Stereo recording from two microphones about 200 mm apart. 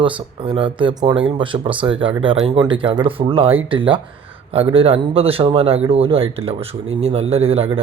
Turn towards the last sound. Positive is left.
turn(degrees=-30)  # may be behind; listen again after turning